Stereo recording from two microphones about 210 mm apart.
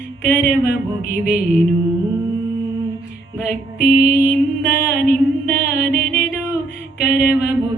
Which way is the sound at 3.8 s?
45° left (ahead or behind).